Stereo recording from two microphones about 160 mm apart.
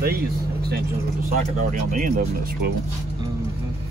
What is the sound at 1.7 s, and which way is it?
Speech, 55° right (ahead or behind).